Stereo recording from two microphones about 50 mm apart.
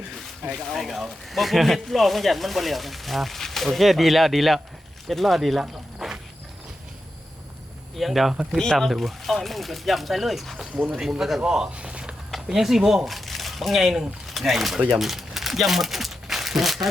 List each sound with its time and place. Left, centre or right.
0.6 s speech: centre
7.9 s speech: centre
8.5 s speech: centre
10.8 s speech: right
11.0 s speech: centre
12.5 s speech: centre